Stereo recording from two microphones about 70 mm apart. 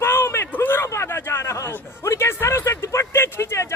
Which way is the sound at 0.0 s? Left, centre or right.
Left.